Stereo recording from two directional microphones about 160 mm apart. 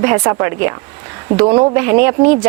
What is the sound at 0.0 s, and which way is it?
Speech, 15° right (ahead or behind).